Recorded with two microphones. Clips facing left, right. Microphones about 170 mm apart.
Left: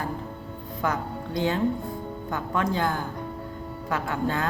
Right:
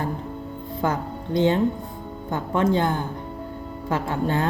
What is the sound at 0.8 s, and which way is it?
A woman's voice, 25° right (ahead or behind).